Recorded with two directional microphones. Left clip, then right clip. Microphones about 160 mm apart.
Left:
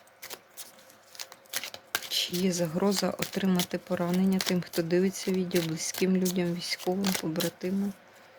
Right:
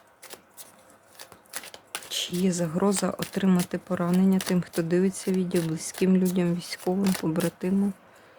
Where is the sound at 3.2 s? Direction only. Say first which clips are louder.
Right 2 dB; 15° right (ahead or behind).